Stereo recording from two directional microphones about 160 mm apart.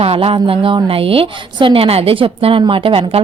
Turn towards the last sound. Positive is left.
turn(degrees=-35)  # may be behind; listen again after turning